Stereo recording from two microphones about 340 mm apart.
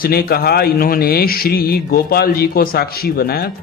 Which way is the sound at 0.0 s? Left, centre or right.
Left.